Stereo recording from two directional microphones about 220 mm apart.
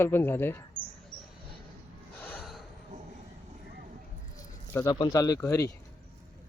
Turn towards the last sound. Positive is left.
turn(degrees=15)  # may be behind; listen again after turning